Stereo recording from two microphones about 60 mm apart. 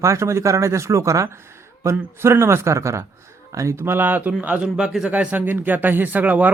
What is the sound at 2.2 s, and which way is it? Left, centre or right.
A man's voice, right.